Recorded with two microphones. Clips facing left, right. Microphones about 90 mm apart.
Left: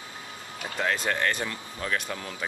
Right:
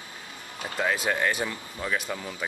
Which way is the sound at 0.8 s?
5° right (ahead or behind).